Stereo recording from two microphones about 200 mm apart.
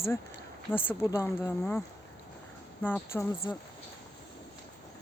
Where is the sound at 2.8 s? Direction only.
10° left (ahead or behind).